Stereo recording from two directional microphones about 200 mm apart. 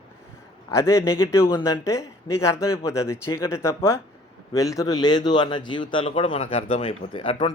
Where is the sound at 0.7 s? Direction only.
15° left (ahead or behind).